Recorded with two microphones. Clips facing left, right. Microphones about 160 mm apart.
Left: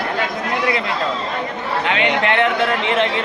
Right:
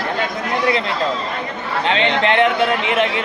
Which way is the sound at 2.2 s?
20° right (ahead or behind).